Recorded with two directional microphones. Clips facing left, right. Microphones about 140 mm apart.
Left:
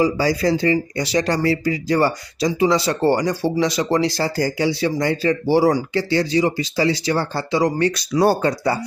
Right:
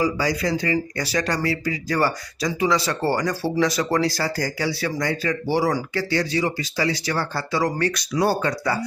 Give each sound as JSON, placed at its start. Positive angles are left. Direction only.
{"t": 0.0, "sound": "speech", "side_deg": 30}